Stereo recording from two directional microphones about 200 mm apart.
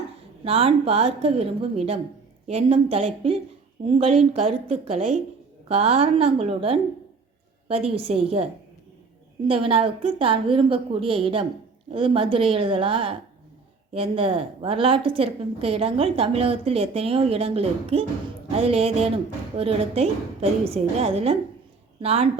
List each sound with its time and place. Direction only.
0.4 s a woman's voice: 30° right (ahead or behind)
9.5 s a woman's voice: 30° right (ahead or behind)